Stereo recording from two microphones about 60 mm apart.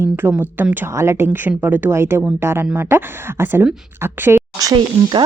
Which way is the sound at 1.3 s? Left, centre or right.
Right.